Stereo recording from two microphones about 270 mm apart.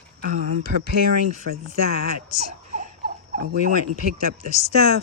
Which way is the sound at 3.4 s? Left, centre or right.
Right.